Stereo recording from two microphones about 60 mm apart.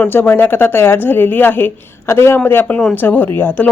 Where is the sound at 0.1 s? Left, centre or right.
Left.